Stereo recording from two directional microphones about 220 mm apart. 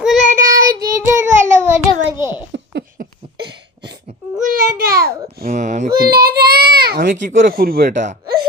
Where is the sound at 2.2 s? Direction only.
10° right (ahead or behind).